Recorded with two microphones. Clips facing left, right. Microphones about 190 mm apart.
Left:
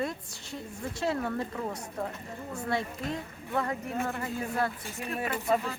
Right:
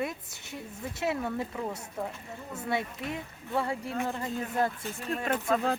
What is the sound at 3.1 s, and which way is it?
Speech, 10° right (ahead or behind).